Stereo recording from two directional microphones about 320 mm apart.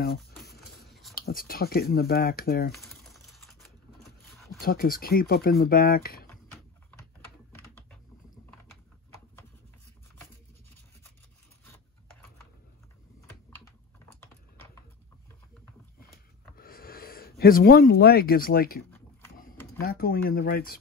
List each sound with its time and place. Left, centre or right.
0.8 s a sound: centre
1.1 s speech: left
2.7 s typing: centre
4.6 s speech: left
16.5 s speech: left